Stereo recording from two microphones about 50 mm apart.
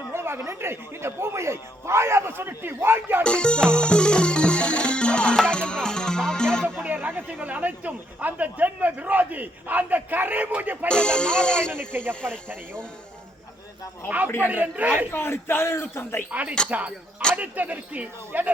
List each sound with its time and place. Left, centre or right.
0.1 s a sound: right
0.4 s speech: right
3.2 s music: centre
6.8 s speech: right
10.8 s speech: centre
11.7 s speech: right
14.4 s speech: right
15.1 s a man's voice: left
16.3 s speech: right